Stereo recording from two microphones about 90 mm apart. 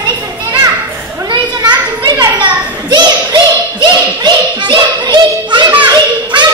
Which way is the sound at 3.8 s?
60° right (ahead or behind).